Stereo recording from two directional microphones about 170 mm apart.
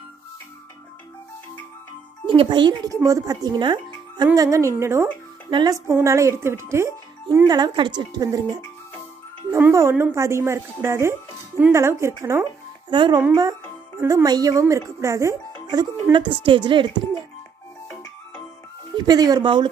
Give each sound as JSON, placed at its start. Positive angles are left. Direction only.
{"t": 2.2, "sound": "speech", "side_deg": -30}
{"t": 19.0, "sound": "speech", "side_deg": -20}